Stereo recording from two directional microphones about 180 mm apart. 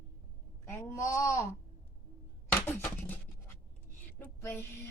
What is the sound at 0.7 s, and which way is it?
Speech, 15° left (ahead or behind).